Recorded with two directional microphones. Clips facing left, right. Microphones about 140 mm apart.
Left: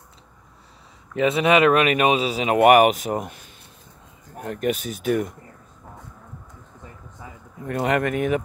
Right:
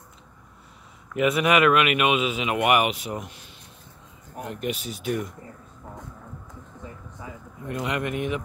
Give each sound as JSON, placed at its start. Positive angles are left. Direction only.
{"t": 1.1, "sound": "speech", "side_deg": 30}
{"t": 4.5, "sound": "speech", "side_deg": 50}
{"t": 7.6, "sound": "speech", "side_deg": 50}